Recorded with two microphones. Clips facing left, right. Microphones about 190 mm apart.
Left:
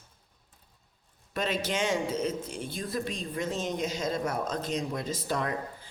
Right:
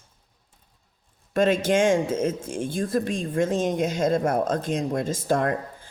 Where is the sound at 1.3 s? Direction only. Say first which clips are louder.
Right 10 dB; 50° right (ahead or behind).